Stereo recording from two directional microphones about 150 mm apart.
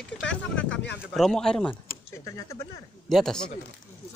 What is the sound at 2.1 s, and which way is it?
Speech, 20° left (ahead or behind).